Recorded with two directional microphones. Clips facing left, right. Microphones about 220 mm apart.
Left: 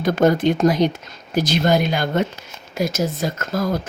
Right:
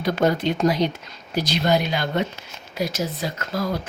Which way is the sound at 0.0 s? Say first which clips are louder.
Left 5 dB; 50° left (ahead or behind).